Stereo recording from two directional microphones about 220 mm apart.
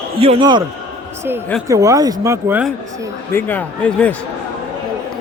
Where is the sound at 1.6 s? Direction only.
15° right (ahead or behind).